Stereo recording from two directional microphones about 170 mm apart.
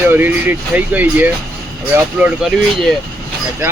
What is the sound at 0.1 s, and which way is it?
Speech, 10° right (ahead or behind).